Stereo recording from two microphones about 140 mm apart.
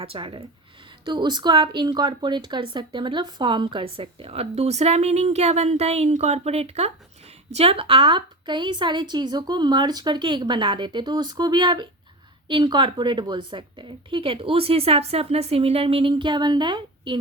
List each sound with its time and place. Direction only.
0.0 s a woman's voice: 40° right (ahead or behind)